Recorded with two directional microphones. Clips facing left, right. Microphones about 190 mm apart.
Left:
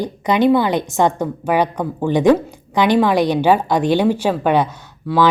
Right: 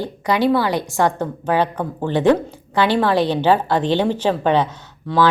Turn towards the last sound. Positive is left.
turn(degrees=10)  # may be behind; listen again after turning